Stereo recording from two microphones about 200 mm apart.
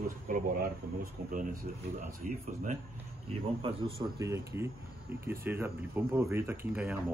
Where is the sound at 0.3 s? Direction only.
40° right (ahead or behind).